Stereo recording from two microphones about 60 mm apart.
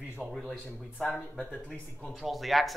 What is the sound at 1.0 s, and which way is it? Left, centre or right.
A man's voice, centre.